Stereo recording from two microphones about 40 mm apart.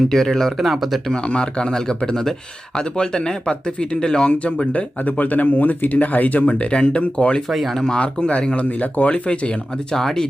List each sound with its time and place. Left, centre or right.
0.1 s speech: centre
0.6 s speech: centre
1.1 s speech: left
4.3 s speech: left
7.0 s speech: left
7.5 s speech: centre
7.9 s speech: left
9.9 s speech: centre